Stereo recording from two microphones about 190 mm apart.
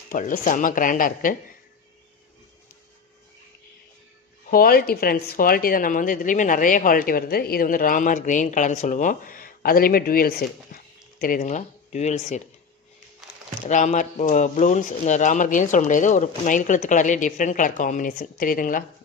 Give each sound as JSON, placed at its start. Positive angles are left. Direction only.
{"t": 0.1, "sound": "a woman's voice", "side_deg": 45}
{"t": 4.5, "sound": "a woman's voice", "side_deg": 50}
{"t": 13.7, "sound": "speech", "side_deg": 40}